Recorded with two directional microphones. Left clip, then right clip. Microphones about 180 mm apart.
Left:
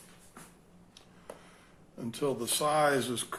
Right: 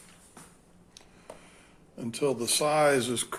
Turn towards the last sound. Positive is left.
turn(degrees=-35)  # may be behind; listen again after turning